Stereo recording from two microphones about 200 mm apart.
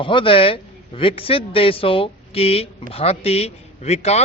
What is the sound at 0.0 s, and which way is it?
A man's voice, 25° left (ahead or behind).